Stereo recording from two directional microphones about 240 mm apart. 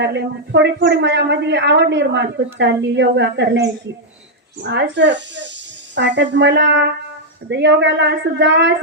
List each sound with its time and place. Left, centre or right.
0.0 s speech: right